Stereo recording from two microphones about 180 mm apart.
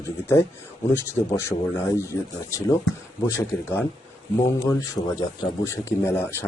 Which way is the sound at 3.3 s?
10° left (ahead or behind).